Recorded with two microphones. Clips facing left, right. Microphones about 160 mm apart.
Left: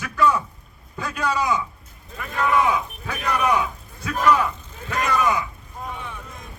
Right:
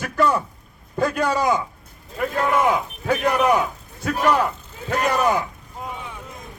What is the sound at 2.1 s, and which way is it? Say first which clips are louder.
Speech: right 2 dB; 30° right (ahead or behind).